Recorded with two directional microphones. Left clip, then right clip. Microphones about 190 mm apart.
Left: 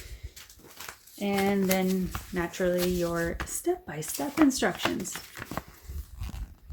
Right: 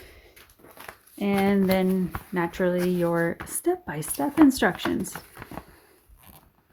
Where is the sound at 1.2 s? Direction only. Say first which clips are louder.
Right 3 dB; 55° right (ahead or behind).